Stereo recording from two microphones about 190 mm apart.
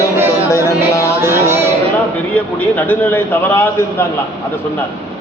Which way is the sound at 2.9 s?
10° left (ahead or behind).